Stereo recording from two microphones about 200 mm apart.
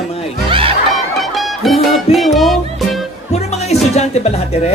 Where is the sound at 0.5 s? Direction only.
25° right (ahead or behind).